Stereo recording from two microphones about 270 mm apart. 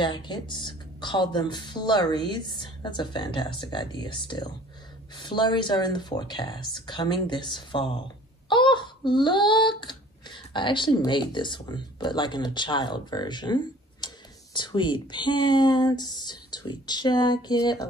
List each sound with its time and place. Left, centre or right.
0.0 s speech: centre